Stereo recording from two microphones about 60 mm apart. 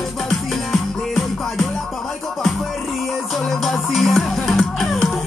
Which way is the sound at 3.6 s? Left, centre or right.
Centre.